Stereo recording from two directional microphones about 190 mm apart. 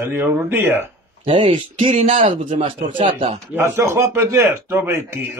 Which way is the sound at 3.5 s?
15° right (ahead or behind).